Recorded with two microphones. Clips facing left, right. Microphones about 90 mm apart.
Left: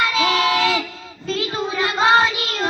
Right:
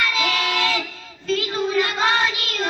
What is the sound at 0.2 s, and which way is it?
Child singing, 30° left (ahead or behind).